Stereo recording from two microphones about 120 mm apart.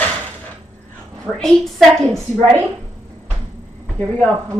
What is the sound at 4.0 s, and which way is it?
Speech, 15° left (ahead or behind).